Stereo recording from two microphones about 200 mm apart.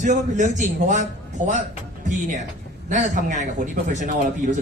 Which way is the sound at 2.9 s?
40° right (ahead or behind).